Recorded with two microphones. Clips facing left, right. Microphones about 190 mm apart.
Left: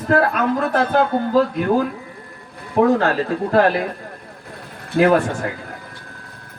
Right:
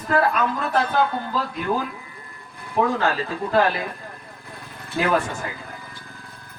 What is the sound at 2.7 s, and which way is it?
Speech, 45° left (ahead or behind).